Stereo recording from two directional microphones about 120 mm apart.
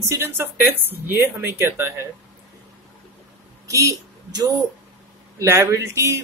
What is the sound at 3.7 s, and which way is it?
Speech, 25° right (ahead or behind).